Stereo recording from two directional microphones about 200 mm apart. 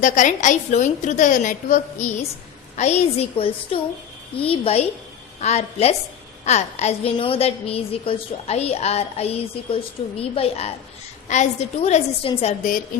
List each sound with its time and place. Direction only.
0.0 s a woman's voice: 40° left (ahead or behind)